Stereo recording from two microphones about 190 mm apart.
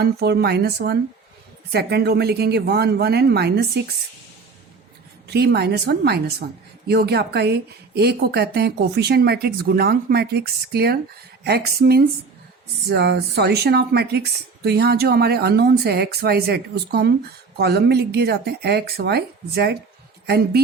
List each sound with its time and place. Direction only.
0.0 s a woman's voice: 55° right (ahead or behind)
5.3 s a woman's voice: 60° right (ahead or behind)